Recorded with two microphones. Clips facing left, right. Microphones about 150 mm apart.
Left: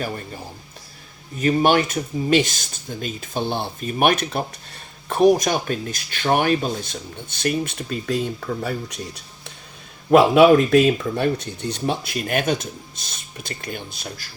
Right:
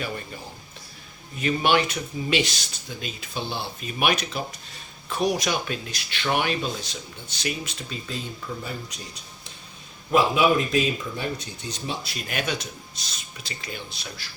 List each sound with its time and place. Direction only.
1.4 s speech: 45° left (ahead or behind); by 9.0 s 60° left (ahead or behind)
10.1 s speech: 65° left (ahead or behind); by 14.3 s 45° left (ahead or behind)